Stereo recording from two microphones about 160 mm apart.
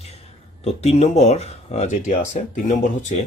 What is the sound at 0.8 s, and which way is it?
Speech, 40° left (ahead or behind).